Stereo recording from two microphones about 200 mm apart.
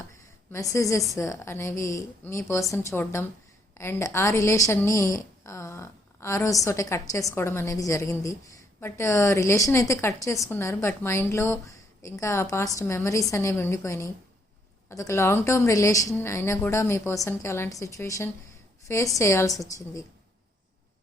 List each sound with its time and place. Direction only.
0.5 s a woman's voice: 15° left (ahead or behind)